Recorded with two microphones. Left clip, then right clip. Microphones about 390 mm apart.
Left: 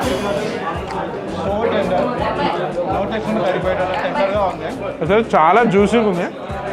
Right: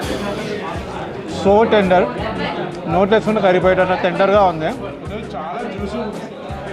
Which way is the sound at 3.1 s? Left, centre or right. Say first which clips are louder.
Right 5 dB; right.